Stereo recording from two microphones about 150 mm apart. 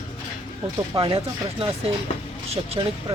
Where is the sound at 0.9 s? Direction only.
40° right (ahead or behind).